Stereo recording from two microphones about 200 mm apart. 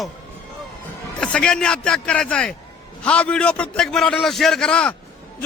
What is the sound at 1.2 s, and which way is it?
A man's voice, 5° left (ahead or behind).